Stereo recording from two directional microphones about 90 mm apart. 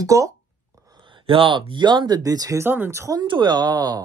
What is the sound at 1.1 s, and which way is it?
Speech, 75° right (ahead or behind).